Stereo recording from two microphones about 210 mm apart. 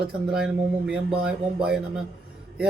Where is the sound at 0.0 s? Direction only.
5° right (ahead or behind).